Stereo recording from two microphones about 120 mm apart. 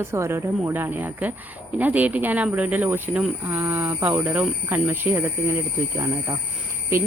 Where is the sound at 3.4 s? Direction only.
20° right (ahead or behind).